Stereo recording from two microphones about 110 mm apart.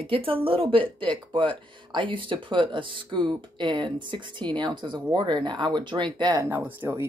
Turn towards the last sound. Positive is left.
turn(degrees=-20)  # may be behind; listen again after turning